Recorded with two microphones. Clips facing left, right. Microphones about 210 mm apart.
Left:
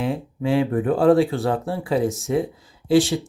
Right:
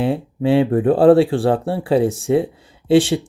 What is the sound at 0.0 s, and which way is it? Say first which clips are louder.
Speech: right 5 dB; 30° right (ahead or behind).